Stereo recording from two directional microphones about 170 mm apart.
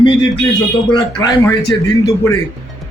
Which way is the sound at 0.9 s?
25° left (ahead or behind).